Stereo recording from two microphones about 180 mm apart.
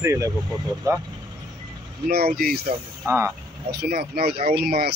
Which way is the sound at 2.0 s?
60° right (ahead or behind).